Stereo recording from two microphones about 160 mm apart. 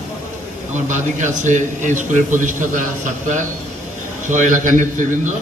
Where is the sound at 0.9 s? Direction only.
50° right (ahead or behind).